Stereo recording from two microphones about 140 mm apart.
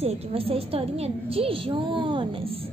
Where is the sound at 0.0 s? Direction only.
45° right (ahead or behind).